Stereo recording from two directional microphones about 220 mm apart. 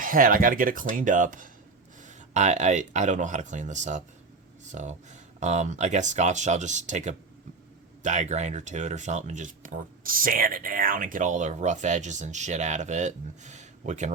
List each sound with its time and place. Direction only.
0.0 s speech: 40° right (ahead or behind)